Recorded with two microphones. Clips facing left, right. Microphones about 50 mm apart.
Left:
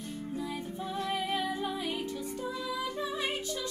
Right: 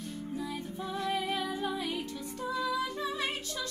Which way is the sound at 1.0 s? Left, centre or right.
Centre.